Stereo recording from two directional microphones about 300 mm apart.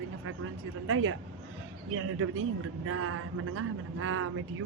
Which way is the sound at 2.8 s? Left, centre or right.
Right.